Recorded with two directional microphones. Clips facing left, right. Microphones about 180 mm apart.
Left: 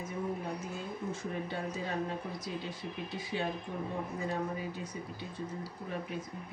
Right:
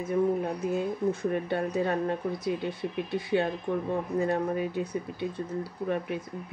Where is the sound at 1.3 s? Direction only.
60° right (ahead or behind).